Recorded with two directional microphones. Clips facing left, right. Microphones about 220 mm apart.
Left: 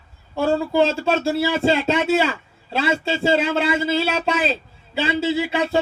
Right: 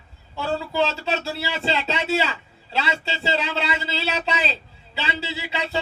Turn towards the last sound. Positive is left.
turn(degrees=50)  # may be behind; listen again after turning